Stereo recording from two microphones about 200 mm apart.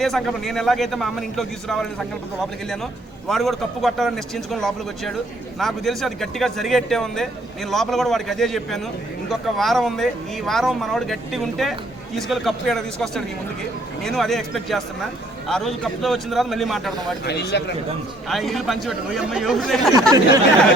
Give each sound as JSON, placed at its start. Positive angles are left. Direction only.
{"t": 0.0, "sound": "speech", "side_deg": 0}
{"t": 3.2, "sound": "speech", "side_deg": 0}
{"t": 17.5, "sound": "a man's voice", "side_deg": 60}
{"t": 18.3, "sound": "speech", "side_deg": 0}
{"t": 20.1, "sound": "speech", "side_deg": -20}